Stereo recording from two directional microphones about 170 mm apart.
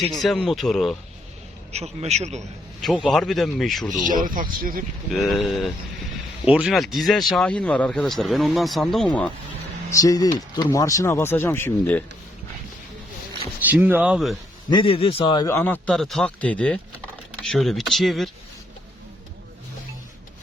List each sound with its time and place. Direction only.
0.0 s speech: centre (ahead or behind)
1.7 s a man's voice: 40° right (ahead or behind)
2.8 s speech: 5° left (ahead or behind)
4.1 s speech: 55° right (ahead or behind)
5.1 s speech: centre (ahead or behind)
9.9 s speech: 20° left (ahead or behind)
13.7 s speech: 10° right (ahead or behind)
14.7 s speech: 30° left (ahead or behind); by 18.3 s centre (ahead or behind)